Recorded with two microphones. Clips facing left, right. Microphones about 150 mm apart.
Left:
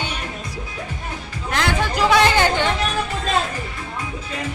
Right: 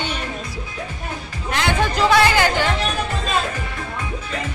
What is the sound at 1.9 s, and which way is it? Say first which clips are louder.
Chatter: even; 20° left (ahead or behind).